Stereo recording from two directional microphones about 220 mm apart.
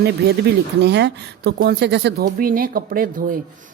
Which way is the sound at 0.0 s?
50° right (ahead or behind).